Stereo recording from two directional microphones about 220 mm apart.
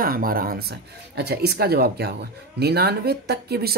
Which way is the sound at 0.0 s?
40° right (ahead or behind).